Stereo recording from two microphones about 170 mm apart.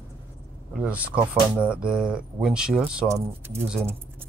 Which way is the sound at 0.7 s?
5° right (ahead or behind).